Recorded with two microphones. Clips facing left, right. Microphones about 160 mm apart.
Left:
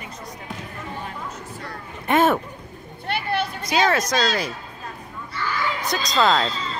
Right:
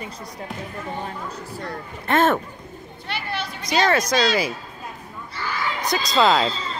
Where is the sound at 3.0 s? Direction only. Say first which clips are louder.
Left 5 dB; 55° left (ahead or behind).